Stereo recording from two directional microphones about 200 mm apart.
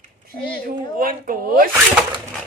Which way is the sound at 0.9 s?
45° right (ahead or behind).